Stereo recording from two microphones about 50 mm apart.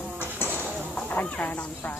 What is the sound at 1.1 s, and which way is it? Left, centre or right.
Speech, left.